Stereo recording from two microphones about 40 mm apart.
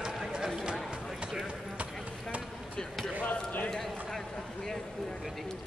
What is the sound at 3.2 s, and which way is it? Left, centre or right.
Basketball bounce, left.